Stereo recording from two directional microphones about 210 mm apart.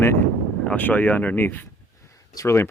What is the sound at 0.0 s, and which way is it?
Speech, 10° left (ahead or behind).